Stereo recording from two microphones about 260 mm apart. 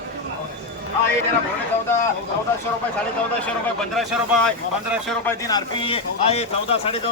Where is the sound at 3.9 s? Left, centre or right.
Centre.